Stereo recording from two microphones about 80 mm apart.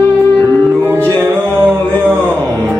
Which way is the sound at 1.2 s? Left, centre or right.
Right.